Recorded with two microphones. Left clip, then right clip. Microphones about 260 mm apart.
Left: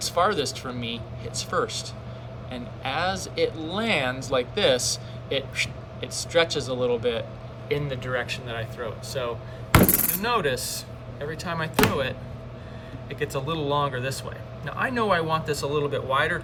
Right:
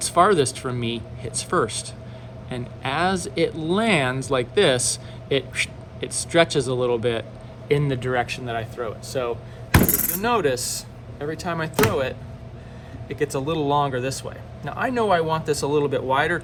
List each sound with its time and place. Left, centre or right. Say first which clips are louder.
0.0 s speech: right 6 dB; right